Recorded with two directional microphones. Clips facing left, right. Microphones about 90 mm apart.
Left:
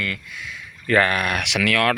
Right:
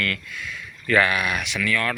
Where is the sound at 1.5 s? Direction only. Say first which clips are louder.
Left 5 dB; 85° left.